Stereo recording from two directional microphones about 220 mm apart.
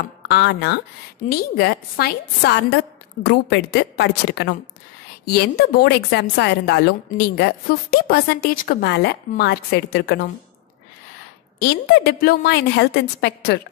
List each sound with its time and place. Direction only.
0.3 s a woman's voice: 50° left (ahead or behind)
11.6 s a woman's voice: 50° left (ahead or behind)